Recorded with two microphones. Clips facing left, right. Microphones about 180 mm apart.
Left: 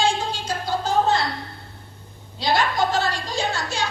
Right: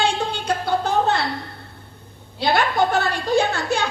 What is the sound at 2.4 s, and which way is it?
A woman's voice, 60° right (ahead or behind).